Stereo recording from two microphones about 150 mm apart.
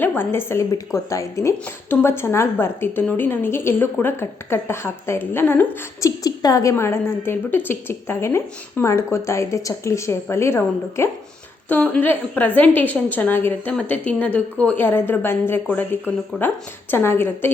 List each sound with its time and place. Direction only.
0.0 s a woman's voice: 15° left (ahead or behind)